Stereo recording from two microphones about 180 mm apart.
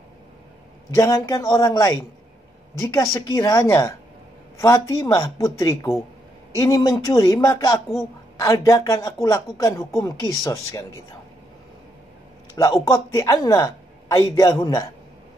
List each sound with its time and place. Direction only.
0.9 s speech: 20° left (ahead or behind)
12.6 s a man's voice: 20° left (ahead or behind)